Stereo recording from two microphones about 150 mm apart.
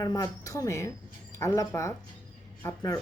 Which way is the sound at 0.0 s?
25° left (ahead or behind).